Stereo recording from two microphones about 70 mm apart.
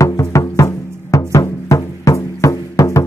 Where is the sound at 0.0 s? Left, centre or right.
Left.